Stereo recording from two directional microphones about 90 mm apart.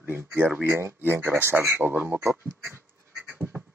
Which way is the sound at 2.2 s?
30° right (ahead or behind).